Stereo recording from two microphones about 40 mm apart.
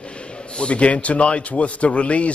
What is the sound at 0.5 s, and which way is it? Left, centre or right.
A man's voice, left.